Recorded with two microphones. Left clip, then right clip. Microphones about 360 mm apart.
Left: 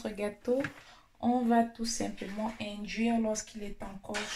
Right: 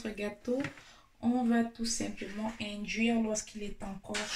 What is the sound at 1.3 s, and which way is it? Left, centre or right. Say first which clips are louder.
Speech: left 4 dB; centre.